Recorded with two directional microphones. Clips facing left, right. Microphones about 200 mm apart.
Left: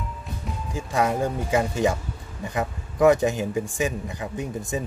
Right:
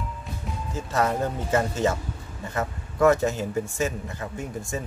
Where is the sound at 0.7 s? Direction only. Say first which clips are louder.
Left 1 dB; 10° left (ahead or behind).